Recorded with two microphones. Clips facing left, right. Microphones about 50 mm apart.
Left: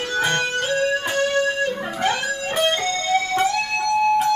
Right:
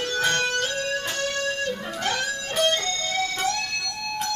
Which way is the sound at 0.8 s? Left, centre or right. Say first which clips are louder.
Left 6 dB; centre.